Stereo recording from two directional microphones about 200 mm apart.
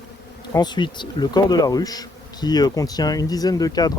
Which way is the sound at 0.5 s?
20° left (ahead or behind).